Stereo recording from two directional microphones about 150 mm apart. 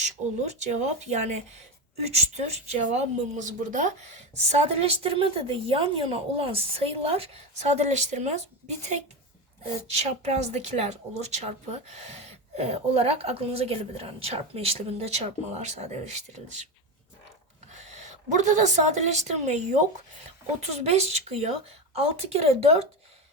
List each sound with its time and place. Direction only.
0.0 s a woman's voice: 50° right (ahead or behind)
17.7 s a woman's voice: 50° right (ahead or behind)